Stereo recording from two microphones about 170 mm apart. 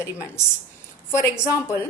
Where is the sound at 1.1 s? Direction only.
15° left (ahead or behind).